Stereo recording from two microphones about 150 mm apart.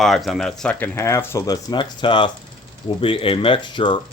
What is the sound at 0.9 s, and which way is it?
Speech, 15° left (ahead or behind).